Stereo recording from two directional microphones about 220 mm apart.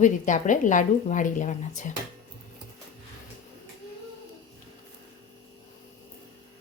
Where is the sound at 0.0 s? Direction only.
35° left (ahead or behind).